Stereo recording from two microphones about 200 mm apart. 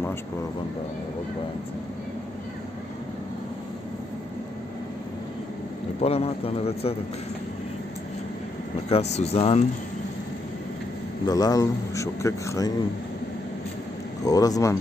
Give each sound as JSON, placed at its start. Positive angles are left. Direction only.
{"t": 5.9, "sound": "a man's voice", "side_deg": 30}
{"t": 8.8, "sound": "speech", "side_deg": 30}
{"t": 11.2, "sound": "a man's voice", "side_deg": 20}
{"t": 14.2, "sound": "a man's voice", "side_deg": 20}